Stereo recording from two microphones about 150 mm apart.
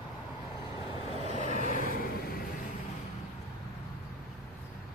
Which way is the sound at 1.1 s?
40° left (ahead or behind).